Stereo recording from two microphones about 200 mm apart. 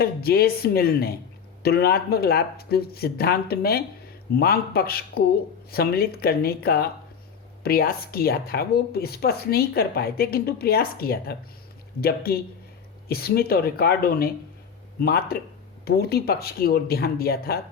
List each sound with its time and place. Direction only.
0.0 s speech: 50° left (ahead or behind)